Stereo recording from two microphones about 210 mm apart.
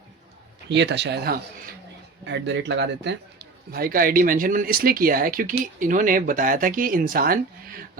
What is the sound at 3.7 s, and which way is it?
Speech, 45° right (ahead or behind).